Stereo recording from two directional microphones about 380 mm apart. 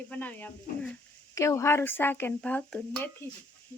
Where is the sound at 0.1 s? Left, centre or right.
Centre.